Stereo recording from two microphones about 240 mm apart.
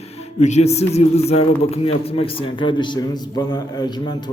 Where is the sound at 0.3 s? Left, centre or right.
Left.